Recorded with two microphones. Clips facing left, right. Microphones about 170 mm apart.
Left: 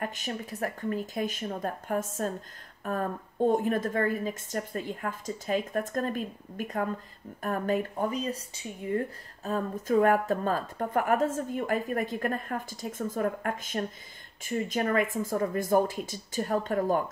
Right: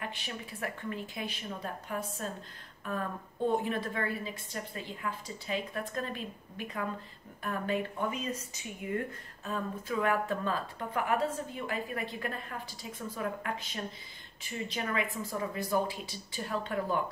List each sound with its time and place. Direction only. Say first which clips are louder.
0.0 s speech: left 6 dB; 45° left (ahead or behind)